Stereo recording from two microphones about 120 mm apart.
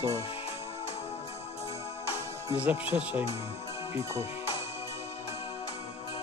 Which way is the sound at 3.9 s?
25° right (ahead or behind).